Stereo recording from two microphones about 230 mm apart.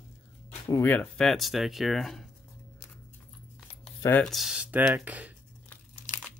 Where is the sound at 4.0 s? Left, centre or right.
Centre.